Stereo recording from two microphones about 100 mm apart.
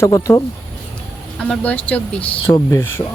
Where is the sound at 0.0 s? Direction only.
30° left (ahead or behind).